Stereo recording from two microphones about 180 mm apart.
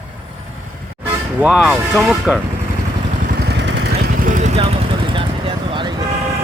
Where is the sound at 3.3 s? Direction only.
65° right (ahead or behind).